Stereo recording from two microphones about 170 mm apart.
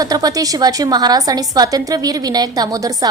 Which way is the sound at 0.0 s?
20° right (ahead or behind).